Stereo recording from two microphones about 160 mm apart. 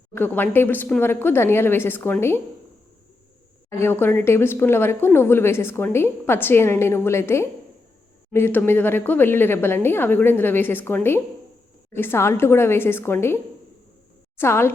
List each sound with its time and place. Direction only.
0.1 s a woman's voice: 15° left (ahead or behind)
3.7 s a woman's voice: 15° left (ahead or behind)